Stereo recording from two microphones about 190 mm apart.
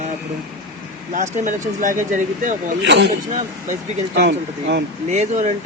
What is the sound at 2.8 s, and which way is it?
Speech, 70° right (ahead or behind).